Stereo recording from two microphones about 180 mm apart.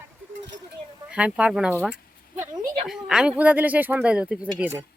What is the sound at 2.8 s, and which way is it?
Speech, centre (ahead or behind).